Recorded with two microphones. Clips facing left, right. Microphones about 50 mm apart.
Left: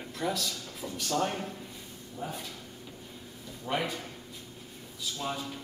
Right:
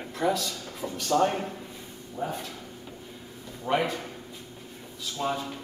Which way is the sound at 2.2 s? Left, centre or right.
Right.